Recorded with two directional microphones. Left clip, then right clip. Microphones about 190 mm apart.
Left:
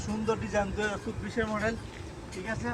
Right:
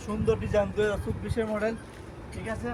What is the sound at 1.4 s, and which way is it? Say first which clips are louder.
Speech: right 1 dB; 55° right (ahead or behind).